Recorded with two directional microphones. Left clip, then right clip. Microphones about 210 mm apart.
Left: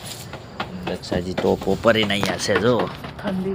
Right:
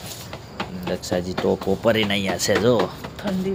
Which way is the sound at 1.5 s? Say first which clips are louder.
Left 2 dB; centre (ahead or behind).